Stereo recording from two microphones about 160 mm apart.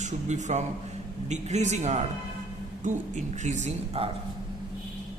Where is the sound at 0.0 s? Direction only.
45° right (ahead or behind).